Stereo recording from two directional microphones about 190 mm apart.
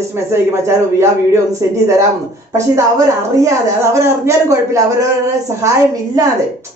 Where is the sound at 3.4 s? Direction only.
15° right (ahead or behind).